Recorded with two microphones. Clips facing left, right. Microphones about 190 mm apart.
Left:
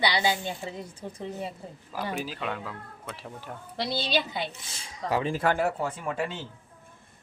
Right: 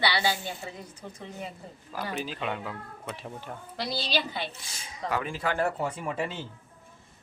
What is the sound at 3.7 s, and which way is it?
A woman's voice, 25° left (ahead or behind).